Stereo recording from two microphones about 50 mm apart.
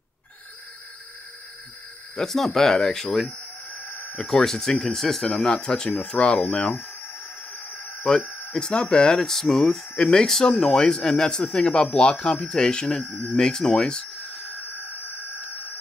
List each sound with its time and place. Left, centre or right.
2.1 s speech: centre
3.3 s chicken: left
4.2 s speech: centre
5.5 s speech: centre
8.2 s a sound: left
8.5 s speech: centre
13.1 s speech: left
13.4 s speech: centre